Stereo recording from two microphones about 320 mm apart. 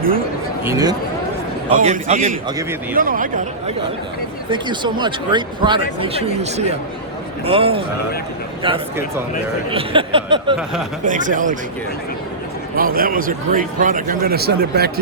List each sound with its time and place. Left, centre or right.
0.6 s speech: centre
1.8 s a man's voice: right
4.4 s a man's voice: centre
12.7 s a man's voice: right